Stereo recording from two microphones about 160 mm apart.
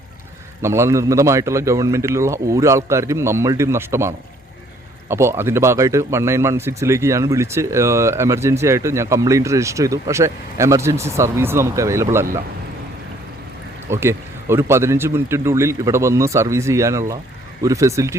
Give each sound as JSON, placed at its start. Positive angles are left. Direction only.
{"t": 0.6, "sound": "a man's voice", "side_deg": -15}
{"t": 13.9, "sound": "a man's voice", "side_deg": -15}